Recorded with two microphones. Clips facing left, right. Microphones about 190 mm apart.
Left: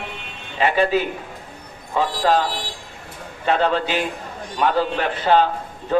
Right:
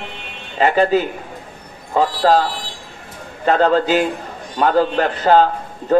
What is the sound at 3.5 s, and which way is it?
A man's voice, 40° right (ahead or behind).